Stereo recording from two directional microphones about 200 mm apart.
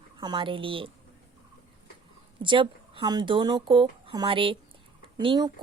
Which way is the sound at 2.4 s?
25° right (ahead or behind).